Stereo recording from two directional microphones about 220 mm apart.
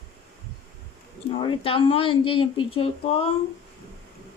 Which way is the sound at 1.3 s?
25° left (ahead or behind).